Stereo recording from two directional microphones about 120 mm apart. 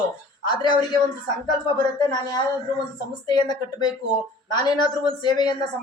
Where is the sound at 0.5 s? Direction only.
40° left (ahead or behind).